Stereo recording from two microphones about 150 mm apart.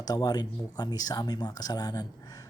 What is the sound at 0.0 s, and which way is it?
A man's voice, 25° left (ahead or behind).